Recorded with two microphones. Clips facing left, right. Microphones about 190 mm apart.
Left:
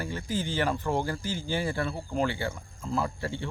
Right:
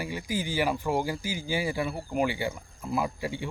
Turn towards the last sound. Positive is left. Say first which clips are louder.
# right 1 dB
turn(degrees=-15)  # may be behind; listen again after turning